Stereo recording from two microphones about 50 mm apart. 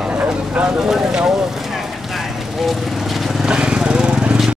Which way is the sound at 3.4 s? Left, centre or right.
Centre.